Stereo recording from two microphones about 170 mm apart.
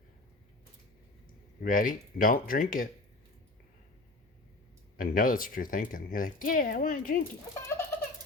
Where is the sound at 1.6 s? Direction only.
55° left (ahead or behind).